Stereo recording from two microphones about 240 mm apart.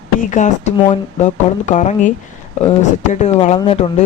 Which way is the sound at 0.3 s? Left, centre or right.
Left.